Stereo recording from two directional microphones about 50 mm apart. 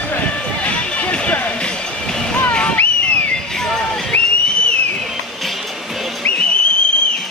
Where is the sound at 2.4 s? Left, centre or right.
Left.